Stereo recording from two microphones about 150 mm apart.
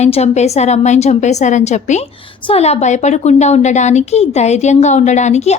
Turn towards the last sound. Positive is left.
turn(degrees=50)  # may be behind; listen again after turning